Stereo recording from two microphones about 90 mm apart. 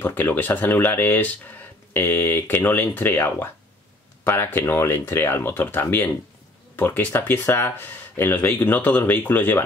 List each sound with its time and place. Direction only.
0.0 s speech: 20° left (ahead or behind)